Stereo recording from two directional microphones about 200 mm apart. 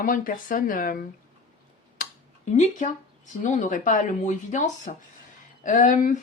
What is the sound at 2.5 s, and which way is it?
Speech, 35° left (ahead or behind).